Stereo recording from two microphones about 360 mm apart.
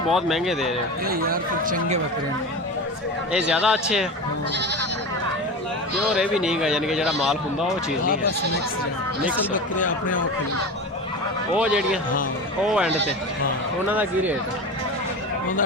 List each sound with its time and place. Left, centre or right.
0.1 s speech: centre
1.0 s speech: right
3.3 s speech: centre
6.1 s speech: centre
9.7 s speech: left
11.5 s speech: centre
13.9 s speech: centre